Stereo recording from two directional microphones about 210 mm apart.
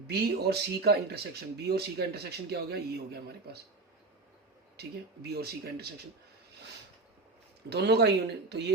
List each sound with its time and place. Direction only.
0.1 s speech: 50° right (ahead or behind)
4.8 s speech: 50° right (ahead or behind)
7.7 s speech: 50° right (ahead or behind)